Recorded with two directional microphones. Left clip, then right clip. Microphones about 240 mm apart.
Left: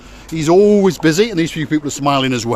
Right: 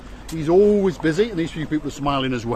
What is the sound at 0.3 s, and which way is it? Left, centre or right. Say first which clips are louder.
Speech: left 5 dB; left.